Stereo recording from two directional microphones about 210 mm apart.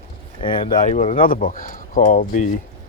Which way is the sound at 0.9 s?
40° left (ahead or behind).